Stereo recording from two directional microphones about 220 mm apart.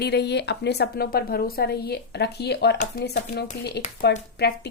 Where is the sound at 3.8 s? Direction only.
35° left (ahead or behind).